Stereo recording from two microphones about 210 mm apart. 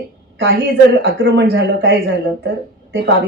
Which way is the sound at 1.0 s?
65° right (ahead or behind).